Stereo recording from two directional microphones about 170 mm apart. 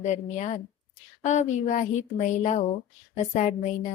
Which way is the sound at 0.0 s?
45° left (ahead or behind).